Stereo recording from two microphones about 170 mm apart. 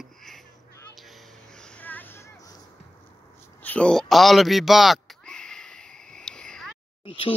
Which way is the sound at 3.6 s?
10° left (ahead or behind).